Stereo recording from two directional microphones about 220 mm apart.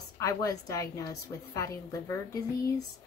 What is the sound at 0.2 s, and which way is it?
Speech, 15° left (ahead or behind).